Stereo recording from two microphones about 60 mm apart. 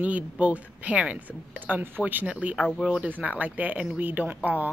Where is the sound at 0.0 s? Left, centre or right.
Right.